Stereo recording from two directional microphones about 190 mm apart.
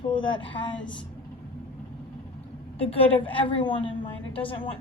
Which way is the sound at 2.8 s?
30° left (ahead or behind).